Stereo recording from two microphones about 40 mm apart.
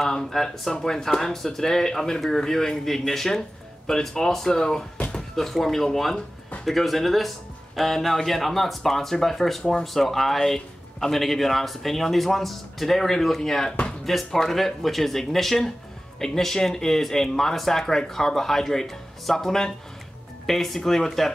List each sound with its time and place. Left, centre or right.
0.1 s speech: centre
5.3 s speech: centre
9.6 s speech: centre
9.9 s speech: centre